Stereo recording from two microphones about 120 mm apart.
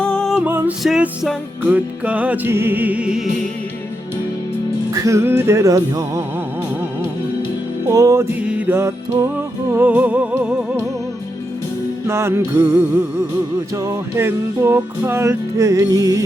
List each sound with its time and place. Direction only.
0.0 s music: 5° left (ahead or behind)
0.4 s music: 15° right (ahead or behind)
0.8 s music: centre (ahead or behind)
1.6 s music: 10° right (ahead or behind)
4.9 s music: 30° right (ahead or behind)
7.9 s music: 25° right (ahead or behind)
8.4 s music: 10° right (ahead or behind)
12.0 s music: 20° right (ahead or behind)
14.2 s music: 20° right (ahead or behind)